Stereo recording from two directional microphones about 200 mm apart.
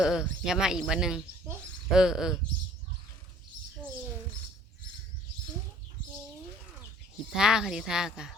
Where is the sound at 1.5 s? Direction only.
5° right (ahead or behind).